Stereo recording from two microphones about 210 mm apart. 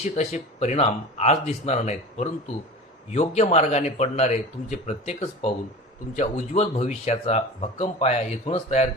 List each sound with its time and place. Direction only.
0.0 s speech: 30° left (ahead or behind)